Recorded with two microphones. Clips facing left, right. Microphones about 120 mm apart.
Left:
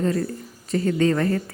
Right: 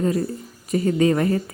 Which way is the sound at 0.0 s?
10° right (ahead or behind).